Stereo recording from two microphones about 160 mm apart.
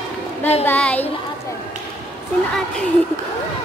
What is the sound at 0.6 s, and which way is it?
Speech, 10° left (ahead or behind).